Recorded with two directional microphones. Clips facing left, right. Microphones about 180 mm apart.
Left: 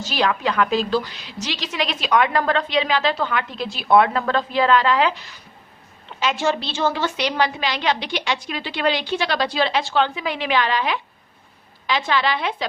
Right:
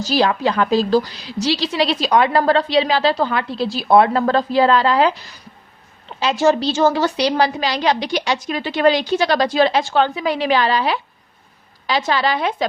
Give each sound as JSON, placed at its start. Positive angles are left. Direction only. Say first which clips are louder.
{"t": 0.0, "sound": "a woman's voice", "louder": "right 5 dB", "side_deg": -35}